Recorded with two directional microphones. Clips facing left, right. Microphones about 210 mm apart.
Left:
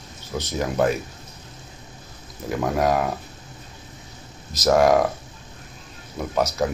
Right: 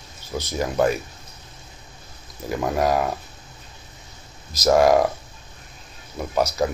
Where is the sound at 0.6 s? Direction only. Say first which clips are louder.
Right 1 dB; centre (ahead or behind).